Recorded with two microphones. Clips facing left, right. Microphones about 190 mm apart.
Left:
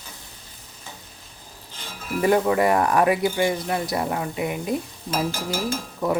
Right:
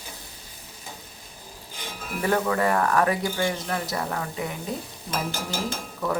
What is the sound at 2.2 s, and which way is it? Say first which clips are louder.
Speech: left 5 dB; 15° left (ahead or behind).